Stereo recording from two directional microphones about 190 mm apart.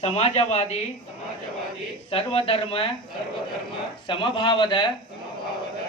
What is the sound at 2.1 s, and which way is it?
Speech, 30° left (ahead or behind).